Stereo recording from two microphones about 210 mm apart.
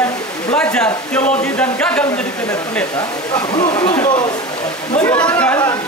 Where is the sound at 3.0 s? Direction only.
20° left (ahead or behind).